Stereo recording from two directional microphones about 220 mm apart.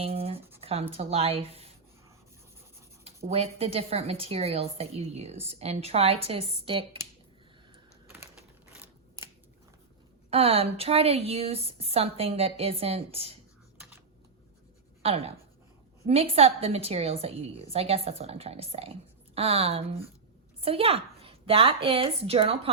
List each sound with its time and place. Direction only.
0.0 s writing: 25° right (ahead or behind)
0.6 s a woman's voice: 25° right (ahead or behind)
3.2 s a woman's voice: 25° right (ahead or behind)
8.7 s scissors: 10° right (ahead or behind)
10.2 s a woman's voice: 25° right (ahead or behind)
15.0 s a woman's voice: 25° right (ahead or behind)